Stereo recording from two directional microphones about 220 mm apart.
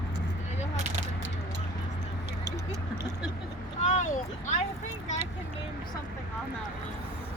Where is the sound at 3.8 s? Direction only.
35° left (ahead or behind).